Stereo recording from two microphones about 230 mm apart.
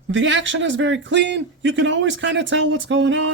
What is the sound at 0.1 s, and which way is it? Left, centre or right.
Speech, right.